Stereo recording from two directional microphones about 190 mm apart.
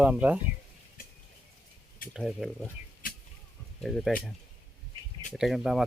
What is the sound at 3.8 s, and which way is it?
Speech, centre (ahead or behind).